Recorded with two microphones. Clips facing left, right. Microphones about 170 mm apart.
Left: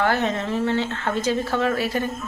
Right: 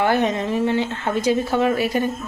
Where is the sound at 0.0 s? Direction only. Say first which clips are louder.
Right 3 dB; 15° right (ahead or behind).